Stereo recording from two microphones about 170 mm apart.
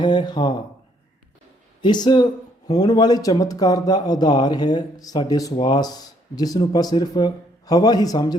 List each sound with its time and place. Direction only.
0.0 s speech: 25° left (ahead or behind)
1.8 s speech: 25° left (ahead or behind)